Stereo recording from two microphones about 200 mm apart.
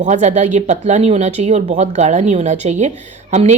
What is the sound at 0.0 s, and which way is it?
Speech, 35° right (ahead or behind).